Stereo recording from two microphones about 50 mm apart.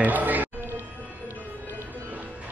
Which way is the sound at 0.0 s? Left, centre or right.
Right.